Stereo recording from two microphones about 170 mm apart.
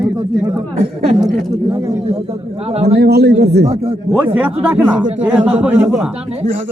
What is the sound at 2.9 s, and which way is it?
Speech, 70° right (ahead or behind).